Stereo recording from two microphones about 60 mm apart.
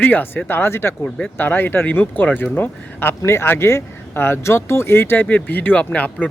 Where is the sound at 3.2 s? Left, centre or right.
Left.